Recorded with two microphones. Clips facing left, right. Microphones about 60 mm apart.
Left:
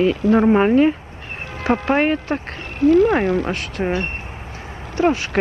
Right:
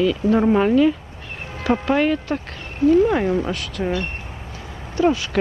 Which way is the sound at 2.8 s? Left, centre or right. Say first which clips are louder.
Left 2 dB; left.